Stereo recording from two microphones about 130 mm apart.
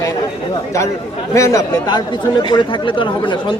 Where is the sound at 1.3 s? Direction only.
25° left (ahead or behind).